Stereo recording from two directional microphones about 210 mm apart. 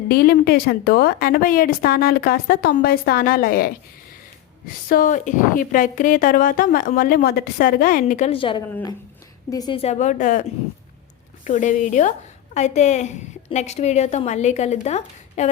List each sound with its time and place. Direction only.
0.1 s a woman's voice: 45° left (ahead or behind)
11.4 s a woman's voice: 35° left (ahead or behind)